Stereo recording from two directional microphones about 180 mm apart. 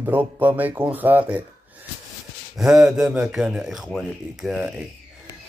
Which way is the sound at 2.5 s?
5° right (ahead or behind).